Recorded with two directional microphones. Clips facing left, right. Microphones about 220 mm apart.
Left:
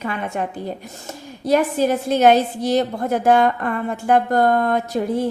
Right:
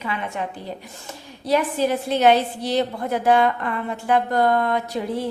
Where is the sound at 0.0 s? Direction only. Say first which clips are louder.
Left 3 dB; 45° left (ahead or behind).